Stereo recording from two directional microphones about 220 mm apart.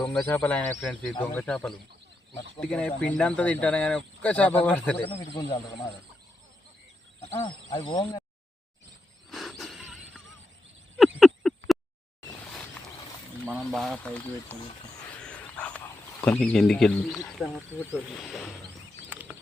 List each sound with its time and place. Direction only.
0.3 s speech: 10° left (ahead or behind)
5.0 s speech: 25° left (ahead or behind)
7.7 s speech: 20° left (ahead or behind)
9.3 s a sound: centre (ahead or behind)
13.7 s speech: centre (ahead or behind)
15.2 s dog: 5° left (ahead or behind)
16.2 s speech: 5° left (ahead or behind)
19.1 s a sound: 10° right (ahead or behind)